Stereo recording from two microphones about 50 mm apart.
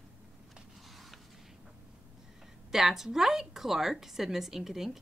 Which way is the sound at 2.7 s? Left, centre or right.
Centre.